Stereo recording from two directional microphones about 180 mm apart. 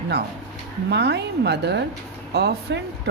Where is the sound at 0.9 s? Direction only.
70° right (ahead or behind).